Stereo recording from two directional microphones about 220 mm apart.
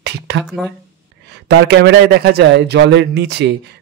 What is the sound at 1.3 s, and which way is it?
A man's voice, 50° right (ahead or behind).